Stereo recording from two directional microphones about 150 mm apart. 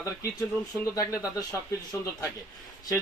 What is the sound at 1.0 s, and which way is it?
Speech, 25° left (ahead or behind).